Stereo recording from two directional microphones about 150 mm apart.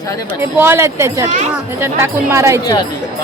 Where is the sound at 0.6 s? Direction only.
15° right (ahead or behind).